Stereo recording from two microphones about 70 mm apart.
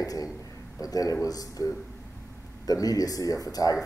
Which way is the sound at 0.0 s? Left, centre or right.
Left.